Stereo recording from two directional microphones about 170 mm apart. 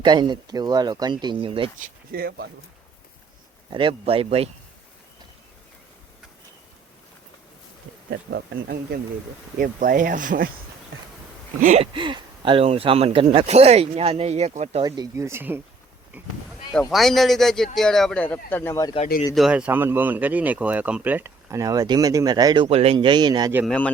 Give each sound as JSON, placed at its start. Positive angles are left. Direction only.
{"t": 0.0, "sound": "speech", "side_deg": -25}
{"t": 1.8, "sound": "speech", "side_deg": -60}
{"t": 3.7, "sound": "speech", "side_deg": -30}
{"t": 8.1, "sound": "speech", "side_deg": -70}
{"t": 9.6, "sound": "speech", "side_deg": -55}
{"t": 11.6, "sound": "speech", "side_deg": -40}
{"t": 14.8, "sound": "speech", "side_deg": -20}
{"t": 19.3, "sound": "speech", "side_deg": -5}
{"t": 23.6, "sound": "speech", "side_deg": 10}